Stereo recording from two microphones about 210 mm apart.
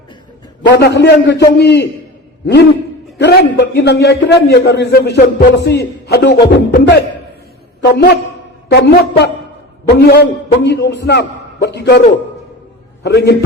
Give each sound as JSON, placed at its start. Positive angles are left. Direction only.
{"t": 0.7, "sound": "a man's voice", "side_deg": 50}
{"t": 3.2, "sound": "a man's voice", "side_deg": 50}